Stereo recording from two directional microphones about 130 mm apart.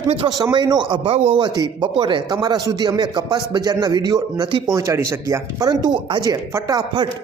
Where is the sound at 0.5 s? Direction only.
35° right (ahead or behind).